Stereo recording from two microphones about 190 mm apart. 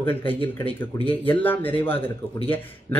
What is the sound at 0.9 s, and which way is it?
Speech, 30° left (ahead or behind).